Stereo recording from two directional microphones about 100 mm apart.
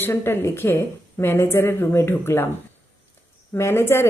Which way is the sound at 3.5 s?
25° left (ahead or behind).